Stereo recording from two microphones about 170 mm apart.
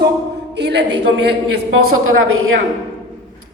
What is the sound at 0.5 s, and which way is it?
Speech, 80° right.